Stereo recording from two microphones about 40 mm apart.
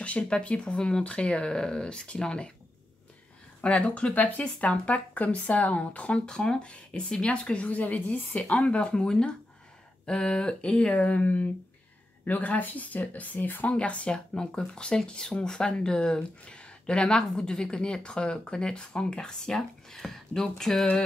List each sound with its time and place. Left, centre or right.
0.0 s speech: left
1.5 s speech: centre
3.6 s speech: left
6.3 s speech: centre
6.6 s speech: left
8.5 s speech: left
11.0 s speech: left
13.7 s speech: left
14.3 s speech: centre